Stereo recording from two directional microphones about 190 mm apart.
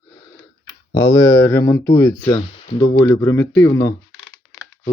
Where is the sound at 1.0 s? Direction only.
15° left (ahead or behind).